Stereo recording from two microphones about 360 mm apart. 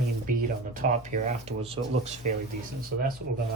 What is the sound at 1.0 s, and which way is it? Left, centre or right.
Speech, centre.